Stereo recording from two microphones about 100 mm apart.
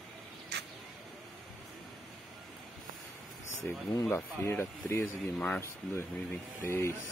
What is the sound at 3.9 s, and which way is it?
Speech, 25° left (ahead or behind).